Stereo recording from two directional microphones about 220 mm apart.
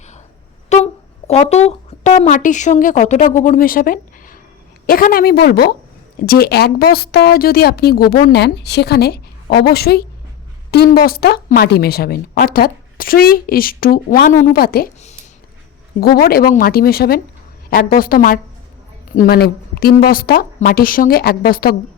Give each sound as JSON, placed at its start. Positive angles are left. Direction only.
{"t": 0.7, "sound": "a sound", "side_deg": 30}
{"t": 1.3, "sound": "a woman's voice", "side_deg": 30}
{"t": 16.0, "sound": "a woman's voice", "side_deg": 45}